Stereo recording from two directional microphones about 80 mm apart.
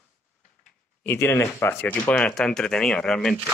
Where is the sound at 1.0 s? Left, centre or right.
Left.